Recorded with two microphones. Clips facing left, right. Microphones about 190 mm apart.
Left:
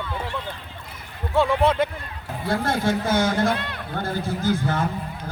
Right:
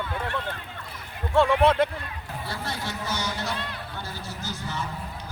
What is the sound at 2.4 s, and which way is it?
A man's voice, 50° left (ahead or behind).